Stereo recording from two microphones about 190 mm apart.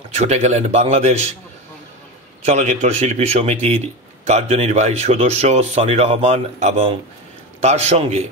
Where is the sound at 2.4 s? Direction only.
35° right (ahead or behind).